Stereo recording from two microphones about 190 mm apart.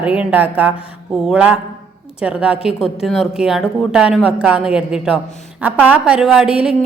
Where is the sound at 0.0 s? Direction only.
5° right (ahead or behind).